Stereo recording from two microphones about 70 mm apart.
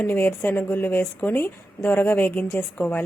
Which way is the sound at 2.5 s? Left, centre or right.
Left.